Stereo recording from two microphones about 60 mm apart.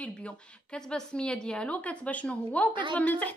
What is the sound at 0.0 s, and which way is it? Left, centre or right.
A woman's voice, centre.